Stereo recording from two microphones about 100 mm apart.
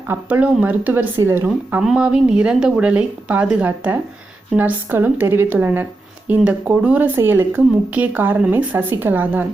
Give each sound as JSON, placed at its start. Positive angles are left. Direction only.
{"t": 0.1, "sound": "speech", "side_deg": -15}
{"t": 1.1, "sound": "speech", "side_deg": -30}
{"t": 1.8, "sound": "speech", "side_deg": -5}